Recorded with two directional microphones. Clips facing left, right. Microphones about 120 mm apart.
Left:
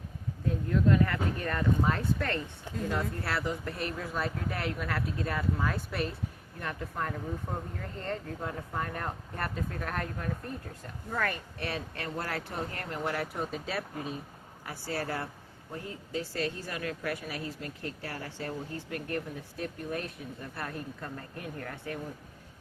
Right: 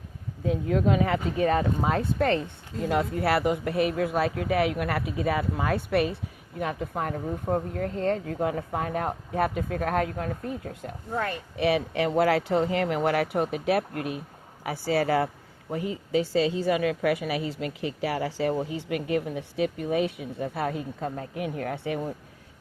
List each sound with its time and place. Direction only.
0.4 s a woman's voice: 90° right
3.2 s speech: 70° right (ahead or behind)
11.1 s speech: 25° right (ahead or behind)
11.5 s a woman's voice: 90° right; by 14.2 s 70° right (ahead or behind)
14.6 s a woman's voice: 90° right